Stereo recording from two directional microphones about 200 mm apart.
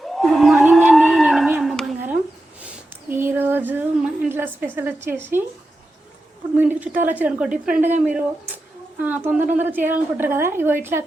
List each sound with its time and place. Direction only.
0.0 s a sound: centre (ahead or behind)
6.6 s a woman's voice: 10° right (ahead or behind)
7.8 s speech: 35° right (ahead or behind)
9.0 s a woman's voice: 10° right (ahead or behind)